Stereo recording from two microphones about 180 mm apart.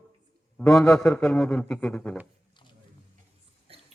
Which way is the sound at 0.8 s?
5° left (ahead or behind).